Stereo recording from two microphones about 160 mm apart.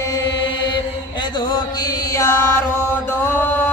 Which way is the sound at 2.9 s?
15° left (ahead or behind).